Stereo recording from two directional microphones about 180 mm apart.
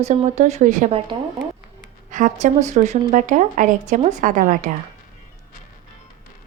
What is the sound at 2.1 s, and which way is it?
Speech, 45° right (ahead or behind).